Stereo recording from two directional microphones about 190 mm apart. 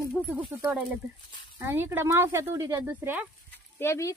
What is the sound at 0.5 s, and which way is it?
Speech, 10° right (ahead or behind).